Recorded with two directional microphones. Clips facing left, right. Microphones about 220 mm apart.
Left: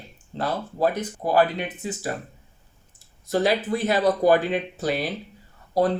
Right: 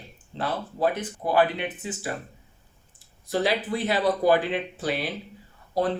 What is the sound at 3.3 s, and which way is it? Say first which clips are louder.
Speech: left 3 dB; 45° left (ahead or behind).